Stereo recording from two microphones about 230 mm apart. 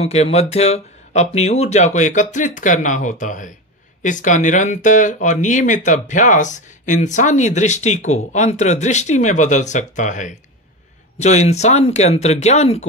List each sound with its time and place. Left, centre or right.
0.0 s speech: left